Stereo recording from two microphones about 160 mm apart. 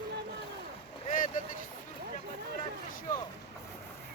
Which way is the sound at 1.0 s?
55° left (ahead or behind).